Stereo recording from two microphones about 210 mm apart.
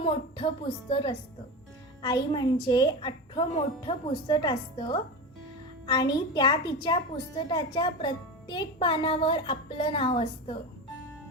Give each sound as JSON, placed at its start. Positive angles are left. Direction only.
{"t": 0.0, "sound": "a woman's voice", "side_deg": 25}